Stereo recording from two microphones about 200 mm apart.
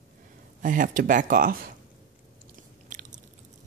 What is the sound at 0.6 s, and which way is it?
Speech, 40° right (ahead or behind).